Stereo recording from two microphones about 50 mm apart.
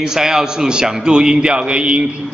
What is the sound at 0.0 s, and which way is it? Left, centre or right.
A man's voice, centre.